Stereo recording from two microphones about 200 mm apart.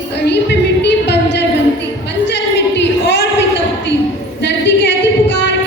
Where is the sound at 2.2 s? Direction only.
60° left (ahead or behind).